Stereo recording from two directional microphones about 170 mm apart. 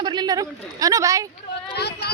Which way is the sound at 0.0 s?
25° right (ahead or behind).